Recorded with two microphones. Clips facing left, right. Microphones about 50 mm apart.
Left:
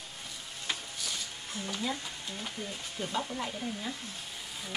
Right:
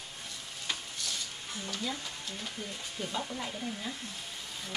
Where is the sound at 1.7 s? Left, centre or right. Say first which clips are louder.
Left 2 dB; centre.